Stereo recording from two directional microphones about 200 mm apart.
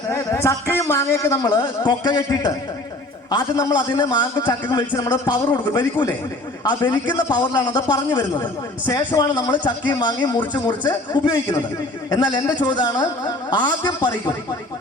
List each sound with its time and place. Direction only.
0.1 s a man's voice: 15° left (ahead or behind)